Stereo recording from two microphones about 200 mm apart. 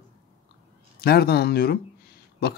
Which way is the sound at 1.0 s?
50° left (ahead or behind).